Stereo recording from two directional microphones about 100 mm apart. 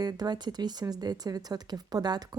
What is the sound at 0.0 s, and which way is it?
Speech, 45° right (ahead or behind).